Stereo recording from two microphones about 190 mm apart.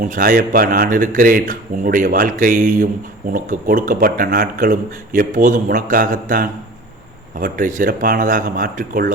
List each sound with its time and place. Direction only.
0.0 s speech: 45° right (ahead or behind)